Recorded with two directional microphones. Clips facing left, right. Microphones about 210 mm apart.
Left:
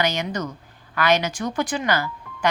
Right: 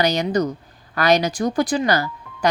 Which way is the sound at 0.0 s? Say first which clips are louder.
Right 6 dB; 40° right (ahead or behind).